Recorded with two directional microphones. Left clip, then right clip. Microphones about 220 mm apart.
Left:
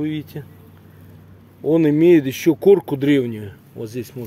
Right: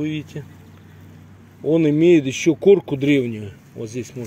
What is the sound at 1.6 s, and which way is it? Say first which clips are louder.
Speech: left 1 dB; 5° left (ahead or behind).